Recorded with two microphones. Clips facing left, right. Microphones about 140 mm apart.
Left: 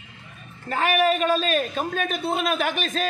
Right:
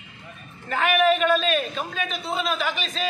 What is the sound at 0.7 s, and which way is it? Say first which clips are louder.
A man's voice: right 1 dB; 35° left (ahead or behind).